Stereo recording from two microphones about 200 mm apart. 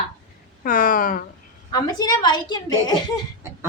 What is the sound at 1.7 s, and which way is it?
A woman's voice, 20° left (ahead or behind).